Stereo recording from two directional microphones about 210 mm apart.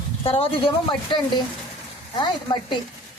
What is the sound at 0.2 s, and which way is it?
Speech, 25° left (ahead or behind).